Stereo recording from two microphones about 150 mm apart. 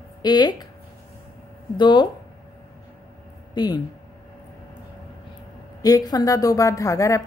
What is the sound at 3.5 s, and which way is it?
Speech, 30° left (ahead or behind).